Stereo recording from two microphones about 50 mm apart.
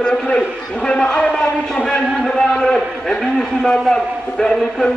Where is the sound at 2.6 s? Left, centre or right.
Centre.